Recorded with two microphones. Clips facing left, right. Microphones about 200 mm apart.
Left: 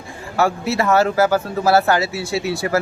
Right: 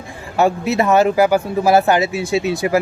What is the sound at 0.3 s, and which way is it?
Speech, 20° right (ahead or behind).